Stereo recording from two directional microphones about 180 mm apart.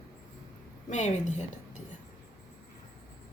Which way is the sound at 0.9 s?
40° left (ahead or behind).